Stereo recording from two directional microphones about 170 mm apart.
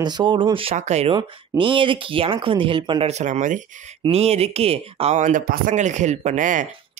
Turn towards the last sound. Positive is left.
turn(degrees=-50)  # may be behind; listen again after turning